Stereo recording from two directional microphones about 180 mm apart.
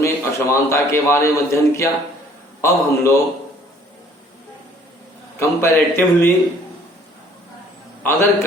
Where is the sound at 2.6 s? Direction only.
15° left (ahead or behind).